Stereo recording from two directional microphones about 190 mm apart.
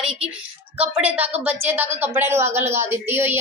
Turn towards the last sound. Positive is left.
turn(degrees=-10)  # may be behind; listen again after turning